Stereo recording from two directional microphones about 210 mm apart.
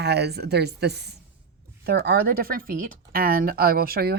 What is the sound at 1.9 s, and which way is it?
Speech, 50° right (ahead or behind).